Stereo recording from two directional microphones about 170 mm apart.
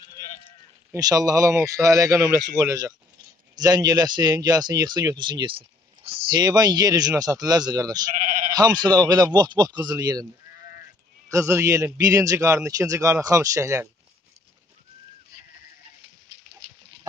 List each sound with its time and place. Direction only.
0.9 s speech: 20° right (ahead or behind)
8.1 s sheep: 55° right (ahead or behind)
8.5 s speech: 25° right (ahead or behind)
11.2 s speech: 15° right (ahead or behind)